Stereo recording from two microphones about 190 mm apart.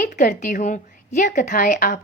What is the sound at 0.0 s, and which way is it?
Speech, 45° left (ahead or behind).